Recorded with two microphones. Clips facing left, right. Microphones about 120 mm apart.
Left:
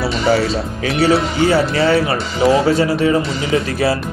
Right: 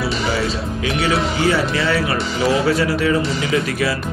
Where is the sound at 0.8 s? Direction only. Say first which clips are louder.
Left 5 dB; 35° left (ahead or behind).